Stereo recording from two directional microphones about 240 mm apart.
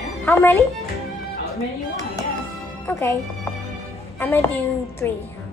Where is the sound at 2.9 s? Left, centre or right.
Centre.